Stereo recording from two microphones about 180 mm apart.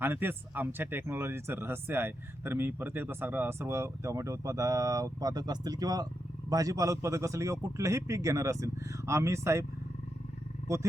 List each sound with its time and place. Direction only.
0.0 s speech: 10° right (ahead or behind)